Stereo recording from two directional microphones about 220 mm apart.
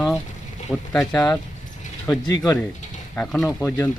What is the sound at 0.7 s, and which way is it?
Speech, 5° left (ahead or behind).